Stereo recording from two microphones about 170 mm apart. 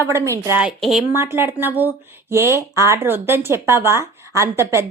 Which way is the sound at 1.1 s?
15° right (ahead or behind).